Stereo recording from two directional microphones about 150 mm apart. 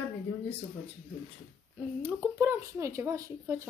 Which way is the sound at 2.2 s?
15° right (ahead or behind).